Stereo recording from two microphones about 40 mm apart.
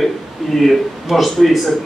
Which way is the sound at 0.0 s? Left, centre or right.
Centre.